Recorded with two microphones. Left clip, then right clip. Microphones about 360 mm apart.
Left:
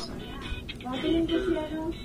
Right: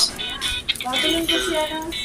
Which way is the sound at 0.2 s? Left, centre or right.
Right.